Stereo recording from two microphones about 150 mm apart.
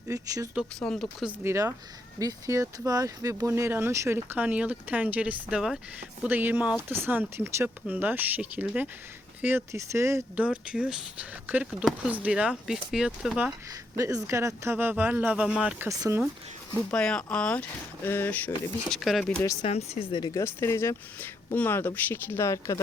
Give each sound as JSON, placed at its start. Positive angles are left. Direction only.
{"t": 0.1, "sound": "speech", "side_deg": -25}
{"t": 0.8, "sound": "speech", "side_deg": 5}
{"t": 1.3, "sound": "speech", "side_deg": -15}
{"t": 13.9, "sound": "speech", "side_deg": -20}
{"t": 15.9, "sound": "speech", "side_deg": -20}
{"t": 16.9, "sound": "speech", "side_deg": 5}
{"t": 19.6, "sound": "speech", "side_deg": 40}
{"t": 20.3, "sound": "speech", "side_deg": 20}